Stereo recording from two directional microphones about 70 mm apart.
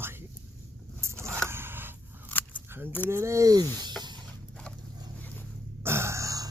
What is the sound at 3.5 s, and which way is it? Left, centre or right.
Speech, right.